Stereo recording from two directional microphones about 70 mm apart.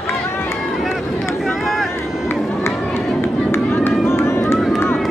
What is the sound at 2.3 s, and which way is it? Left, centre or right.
Run, left.